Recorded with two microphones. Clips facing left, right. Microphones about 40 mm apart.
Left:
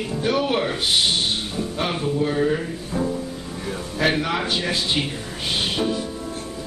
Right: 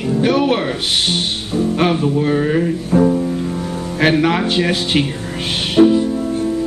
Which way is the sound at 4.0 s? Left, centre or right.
Right.